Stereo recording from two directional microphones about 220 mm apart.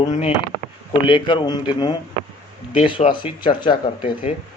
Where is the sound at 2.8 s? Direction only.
25° left (ahead or behind).